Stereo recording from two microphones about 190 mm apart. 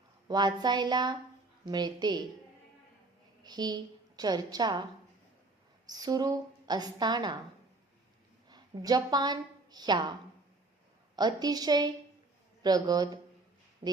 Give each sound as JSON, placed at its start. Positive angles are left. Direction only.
{"t": 0.3, "sound": "a woman's voice", "side_deg": -20}
{"t": 3.4, "sound": "a woman's voice", "side_deg": -20}
{"t": 5.9, "sound": "a woman's voice", "side_deg": -20}
{"t": 8.4, "sound": "a woman's voice", "side_deg": -20}
{"t": 11.2, "sound": "a woman's voice", "side_deg": -20}